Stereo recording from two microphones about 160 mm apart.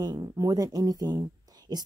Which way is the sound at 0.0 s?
25° right (ahead or behind).